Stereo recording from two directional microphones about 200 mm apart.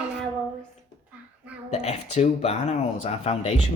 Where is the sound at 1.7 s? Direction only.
35° left (ahead or behind).